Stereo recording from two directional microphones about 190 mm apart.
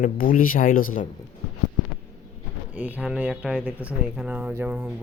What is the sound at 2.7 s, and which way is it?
Speech, 10° right (ahead or behind).